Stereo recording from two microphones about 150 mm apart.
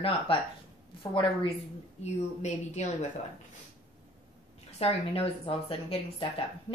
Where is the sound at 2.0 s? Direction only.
50° left (ahead or behind).